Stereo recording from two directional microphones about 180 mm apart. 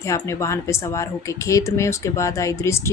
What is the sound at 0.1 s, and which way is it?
Speech, 15° left (ahead or behind).